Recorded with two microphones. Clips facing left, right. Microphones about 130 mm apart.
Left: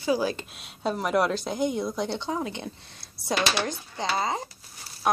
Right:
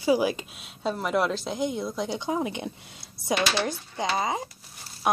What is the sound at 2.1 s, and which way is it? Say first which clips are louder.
Speech: right 2 dB; 15° right (ahead or behind).